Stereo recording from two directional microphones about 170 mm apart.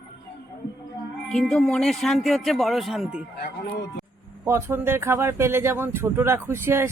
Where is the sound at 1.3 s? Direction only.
5° left (ahead or behind).